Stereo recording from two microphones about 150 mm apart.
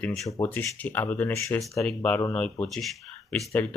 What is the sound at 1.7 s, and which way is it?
Speech, 5° left (ahead or behind).